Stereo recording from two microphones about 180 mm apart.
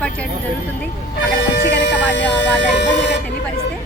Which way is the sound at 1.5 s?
75° left (ahead or behind).